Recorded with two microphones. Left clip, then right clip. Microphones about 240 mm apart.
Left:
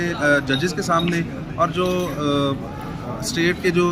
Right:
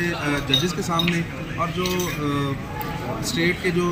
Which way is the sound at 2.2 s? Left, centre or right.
Centre.